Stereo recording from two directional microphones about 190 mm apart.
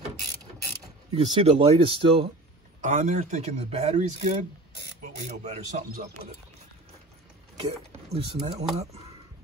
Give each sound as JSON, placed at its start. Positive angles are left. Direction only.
{"t": 1.1, "sound": "speech", "side_deg": -30}
{"t": 2.8, "sound": "a man's voice", "side_deg": -40}
{"t": 8.1, "sound": "a man's voice", "side_deg": -30}